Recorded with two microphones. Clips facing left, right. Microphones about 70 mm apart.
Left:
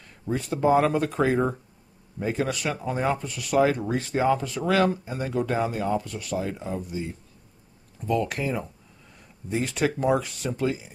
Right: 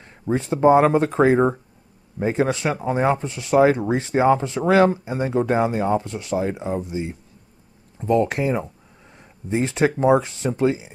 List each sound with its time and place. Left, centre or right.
0.2 s speech: right